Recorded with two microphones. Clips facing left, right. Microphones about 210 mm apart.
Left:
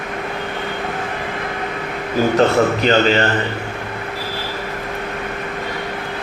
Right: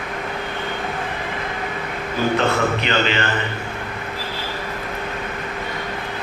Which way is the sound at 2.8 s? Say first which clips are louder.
Left 6 dB; 40° left (ahead or behind).